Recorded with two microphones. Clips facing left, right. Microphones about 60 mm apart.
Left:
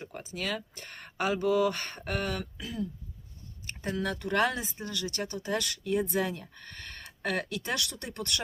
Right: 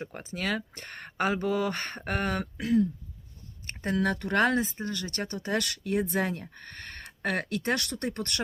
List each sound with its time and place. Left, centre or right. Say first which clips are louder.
0.0 s speech: right 3 dB; right
3.7 s a sound: right 3 dB; right
4.0 s speech: right 2 dB; right